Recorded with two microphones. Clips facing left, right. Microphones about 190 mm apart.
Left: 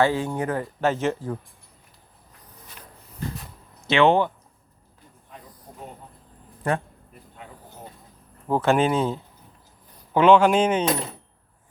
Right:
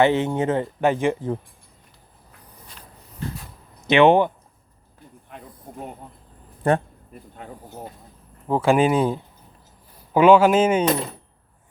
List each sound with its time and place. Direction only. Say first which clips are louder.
0.0 s speech: right 4 dB; 20° right (ahead or behind)
3.8 s speech: right 4 dB; 15° right (ahead or behind)
5.3 s a sound: right 4 dB; 60° right (ahead or behind)
8.6 s speech: right 3 dB; 10° right (ahead or behind)